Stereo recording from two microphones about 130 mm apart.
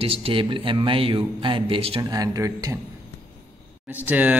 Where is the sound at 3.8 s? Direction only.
15° right (ahead or behind).